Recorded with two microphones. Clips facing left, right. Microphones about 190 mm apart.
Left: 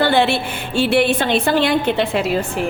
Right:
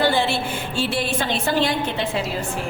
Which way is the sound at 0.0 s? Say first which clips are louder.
Left 4 dB; 65° left (ahead or behind).